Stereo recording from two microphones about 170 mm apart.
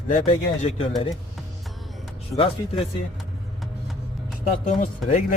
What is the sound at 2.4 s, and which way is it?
Speech, 35° left (ahead or behind).